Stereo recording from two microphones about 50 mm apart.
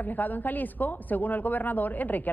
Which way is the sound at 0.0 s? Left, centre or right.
Left.